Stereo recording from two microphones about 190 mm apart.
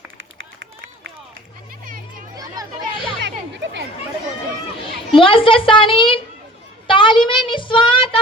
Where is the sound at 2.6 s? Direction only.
20° right (ahead or behind).